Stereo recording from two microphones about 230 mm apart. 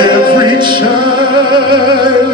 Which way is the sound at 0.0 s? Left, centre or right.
Centre.